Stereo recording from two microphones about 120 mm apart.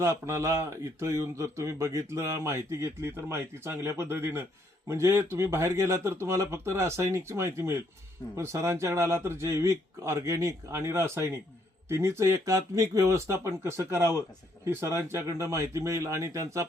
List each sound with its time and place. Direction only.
0.0 s speech: 25° right (ahead or behind)